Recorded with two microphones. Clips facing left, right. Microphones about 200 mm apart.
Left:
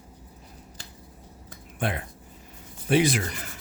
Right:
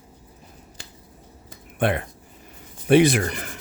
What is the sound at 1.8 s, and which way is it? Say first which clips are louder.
Speech: right 7 dB; 65° right (ahead or behind).